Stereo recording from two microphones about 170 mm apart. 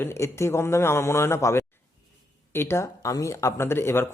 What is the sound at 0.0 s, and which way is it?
Speech, 15° left (ahead or behind).